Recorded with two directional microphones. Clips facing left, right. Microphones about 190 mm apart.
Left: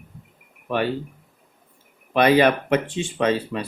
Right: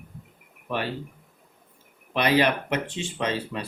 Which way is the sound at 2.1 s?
50° left (ahead or behind).